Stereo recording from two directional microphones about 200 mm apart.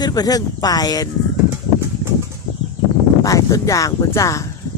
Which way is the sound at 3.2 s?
15° left (ahead or behind).